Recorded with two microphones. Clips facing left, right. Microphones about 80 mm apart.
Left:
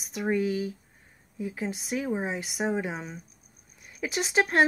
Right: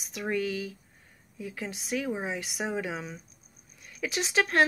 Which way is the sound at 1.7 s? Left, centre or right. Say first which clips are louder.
Even; centre.